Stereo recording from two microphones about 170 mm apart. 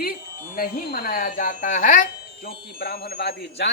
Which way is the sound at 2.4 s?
65° left (ahead or behind).